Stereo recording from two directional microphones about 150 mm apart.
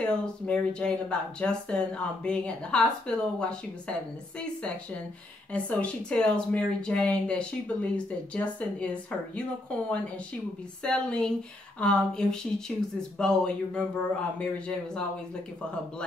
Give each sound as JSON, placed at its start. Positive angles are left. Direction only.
{"t": 0.0, "sound": "speech", "side_deg": 5}